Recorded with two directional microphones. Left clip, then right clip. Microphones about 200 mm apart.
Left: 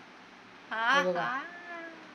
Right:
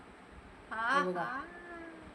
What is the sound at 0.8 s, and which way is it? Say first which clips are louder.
Speech: left 5 dB; centre (ahead or behind).